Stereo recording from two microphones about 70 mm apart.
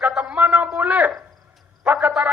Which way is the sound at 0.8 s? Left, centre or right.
Right.